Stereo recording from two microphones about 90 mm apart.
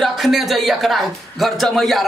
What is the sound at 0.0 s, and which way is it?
Speech, centre (ahead or behind).